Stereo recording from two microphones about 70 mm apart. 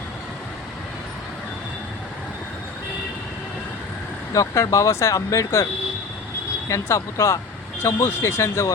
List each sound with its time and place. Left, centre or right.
4.4 s speech: left
6.7 s speech: left